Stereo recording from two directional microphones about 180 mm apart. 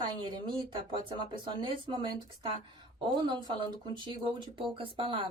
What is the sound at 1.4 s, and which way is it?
Speech, 25° right (ahead or behind).